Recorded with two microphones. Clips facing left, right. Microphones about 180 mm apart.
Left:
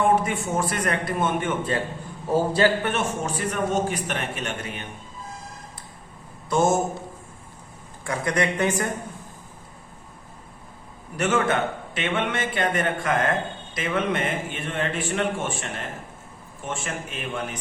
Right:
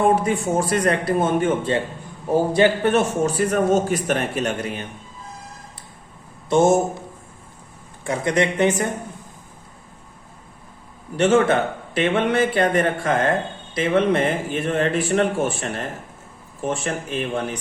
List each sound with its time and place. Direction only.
0.0 s a man's voice: 35° right (ahead or behind)
2.3 s a man's voice: 20° right (ahead or behind)
2.8 s a man's voice: 35° right (ahead or behind)
6.5 s speech: 25° right (ahead or behind)
8.0 s speech: 25° right (ahead or behind)
11.2 s a man's voice: 30° right (ahead or behind)